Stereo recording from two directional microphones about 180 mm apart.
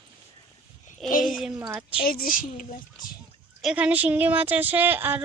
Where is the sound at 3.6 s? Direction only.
5° right (ahead or behind).